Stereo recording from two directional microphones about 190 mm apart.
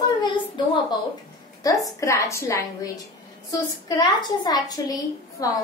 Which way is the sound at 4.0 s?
20° left (ahead or behind).